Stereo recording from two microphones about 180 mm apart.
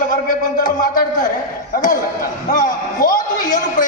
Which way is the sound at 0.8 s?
50° left (ahead or behind).